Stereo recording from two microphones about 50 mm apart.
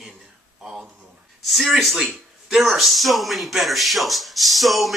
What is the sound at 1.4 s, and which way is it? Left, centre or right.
Speech, centre.